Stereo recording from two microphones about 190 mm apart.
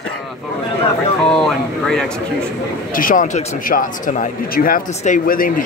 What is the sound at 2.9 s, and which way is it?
Speech, 45° left (ahead or behind).